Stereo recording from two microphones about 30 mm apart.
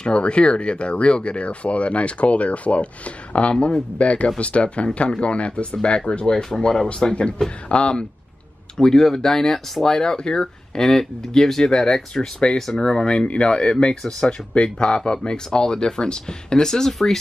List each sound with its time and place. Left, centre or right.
0.0 s speech: left
7.7 s speech: left
8.7 s speech: centre
10.8 s speech: centre
12.1 s speech: left
12.5 s speech: centre
12.8 s speech: left
16.6 s speech: centre